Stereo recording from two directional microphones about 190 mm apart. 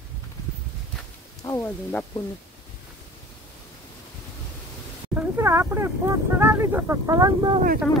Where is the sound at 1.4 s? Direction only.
15° left (ahead or behind).